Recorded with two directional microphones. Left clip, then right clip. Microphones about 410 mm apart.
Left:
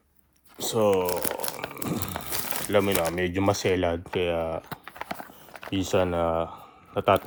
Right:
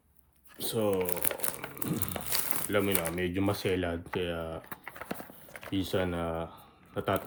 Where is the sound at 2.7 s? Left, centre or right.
Centre.